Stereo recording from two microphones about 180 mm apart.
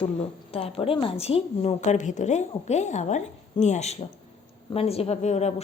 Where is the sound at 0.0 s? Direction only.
35° left (ahead or behind).